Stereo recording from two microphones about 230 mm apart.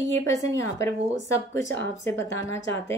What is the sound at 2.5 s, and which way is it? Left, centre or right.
Speech, left.